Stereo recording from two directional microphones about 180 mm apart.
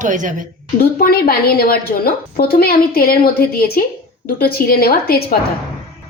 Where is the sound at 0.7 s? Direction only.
55° left (ahead or behind).